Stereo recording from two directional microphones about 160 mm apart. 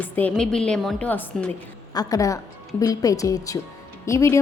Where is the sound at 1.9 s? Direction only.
20° left (ahead or behind).